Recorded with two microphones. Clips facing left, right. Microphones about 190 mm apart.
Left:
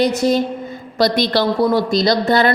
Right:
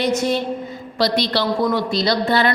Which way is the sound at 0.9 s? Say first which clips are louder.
Left 3 dB; 50° left (ahead or behind).